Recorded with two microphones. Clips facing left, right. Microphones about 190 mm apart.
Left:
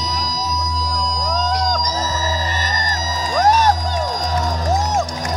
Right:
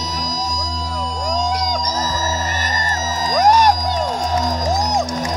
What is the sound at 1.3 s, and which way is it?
Music, 10° right (ahead or behind).